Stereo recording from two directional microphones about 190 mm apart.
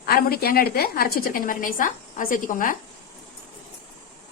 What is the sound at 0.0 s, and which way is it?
A woman's voice, 55° left (ahead or behind).